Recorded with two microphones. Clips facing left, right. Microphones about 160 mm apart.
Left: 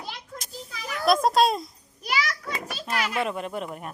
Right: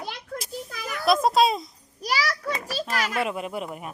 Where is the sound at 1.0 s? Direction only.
Centre (ahead or behind).